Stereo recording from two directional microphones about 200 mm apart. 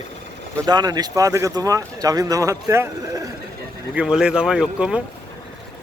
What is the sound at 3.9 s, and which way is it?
Speech, 5° right (ahead or behind).